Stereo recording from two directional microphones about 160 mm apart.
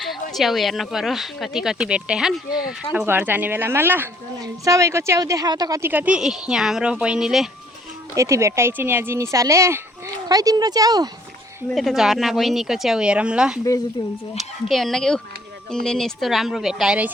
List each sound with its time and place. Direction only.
0.0 s a woman's voice: centre (ahead or behind)
8.1 s a woman's voice: 20° right (ahead or behind)
11.7 s speech: centre (ahead or behind)
14.7 s speech: centre (ahead or behind)